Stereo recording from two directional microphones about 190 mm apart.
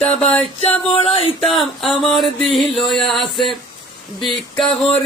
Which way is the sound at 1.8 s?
Centre (ahead or behind).